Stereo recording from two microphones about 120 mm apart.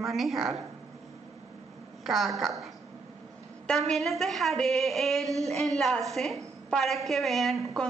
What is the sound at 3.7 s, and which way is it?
A woman's voice, 5° left (ahead or behind).